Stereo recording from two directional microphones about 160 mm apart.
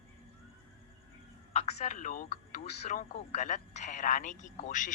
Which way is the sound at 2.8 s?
45° left (ahead or behind).